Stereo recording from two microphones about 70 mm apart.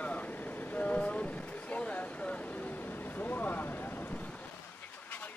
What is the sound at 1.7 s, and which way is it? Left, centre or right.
Vehicle, left.